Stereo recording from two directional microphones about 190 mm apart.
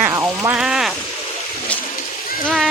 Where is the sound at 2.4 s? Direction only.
Centre (ahead or behind).